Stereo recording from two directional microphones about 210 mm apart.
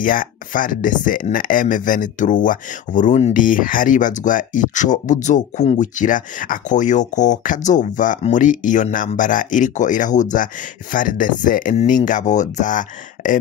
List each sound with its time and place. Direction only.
0.0 s speech: 40° left (ahead or behind)